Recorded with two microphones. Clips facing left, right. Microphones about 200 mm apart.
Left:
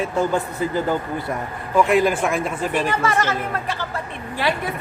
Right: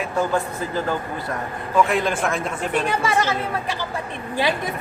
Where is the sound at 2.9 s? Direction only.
10° right (ahead or behind).